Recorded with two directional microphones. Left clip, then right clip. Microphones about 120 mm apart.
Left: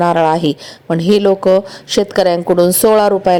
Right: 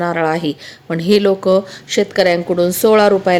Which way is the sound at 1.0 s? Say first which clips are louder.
Left 2 dB; 25° left (ahead or behind).